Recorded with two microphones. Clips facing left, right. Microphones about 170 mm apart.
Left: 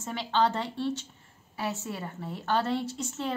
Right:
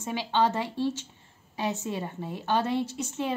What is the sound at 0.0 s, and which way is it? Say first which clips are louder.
A woman's voice: right 1 dB; 15° right (ahead or behind).